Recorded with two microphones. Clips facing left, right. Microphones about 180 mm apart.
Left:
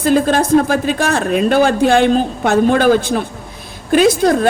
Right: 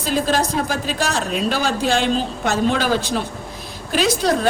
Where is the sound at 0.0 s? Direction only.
55° left (ahead or behind).